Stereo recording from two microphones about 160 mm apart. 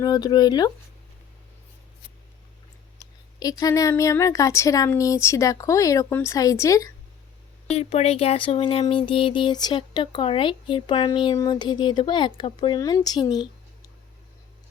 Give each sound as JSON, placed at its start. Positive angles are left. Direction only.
{"t": 0.0, "sound": "speech", "side_deg": 25}
{"t": 3.6, "sound": "speech", "side_deg": 20}
{"t": 7.7, "sound": "speech", "side_deg": 40}